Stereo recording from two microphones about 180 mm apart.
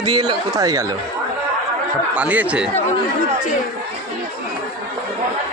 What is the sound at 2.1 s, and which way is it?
Speech, 10° right (ahead or behind).